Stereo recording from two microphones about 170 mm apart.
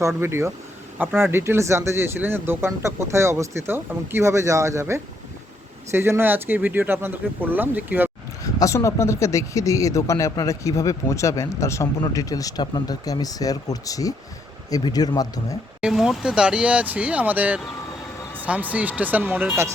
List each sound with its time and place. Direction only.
0.2 s speech: 15° right (ahead or behind)
8.5 s speech: 20° left (ahead or behind)
15.8 s speech: centre (ahead or behind)